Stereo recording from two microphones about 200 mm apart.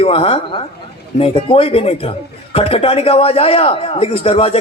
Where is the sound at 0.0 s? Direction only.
30° left (ahead or behind).